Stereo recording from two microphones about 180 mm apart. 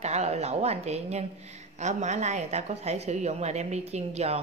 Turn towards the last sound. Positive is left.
turn(degrees=-35)  # may be behind; listen again after turning